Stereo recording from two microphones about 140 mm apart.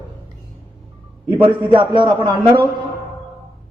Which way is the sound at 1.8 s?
35° right (ahead or behind).